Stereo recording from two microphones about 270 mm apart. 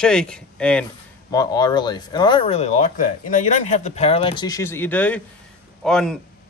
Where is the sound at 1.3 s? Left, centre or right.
Centre.